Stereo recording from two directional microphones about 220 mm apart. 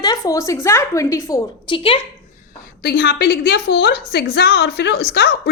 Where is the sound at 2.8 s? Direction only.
45° left (ahead or behind).